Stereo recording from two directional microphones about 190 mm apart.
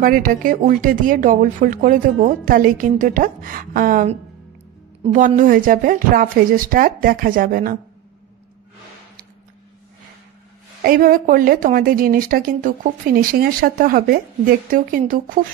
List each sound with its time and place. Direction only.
0.0 s speech: 45° right (ahead or behind)
10.8 s speech: 50° right (ahead or behind)